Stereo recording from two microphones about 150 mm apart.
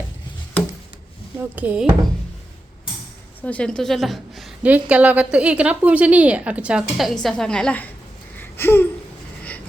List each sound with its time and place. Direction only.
1.5 s a woman's voice: 10° right (ahead or behind)
3.4 s a woman's voice: 10° left (ahead or behind)
8.4 s a sound: 15° left (ahead or behind)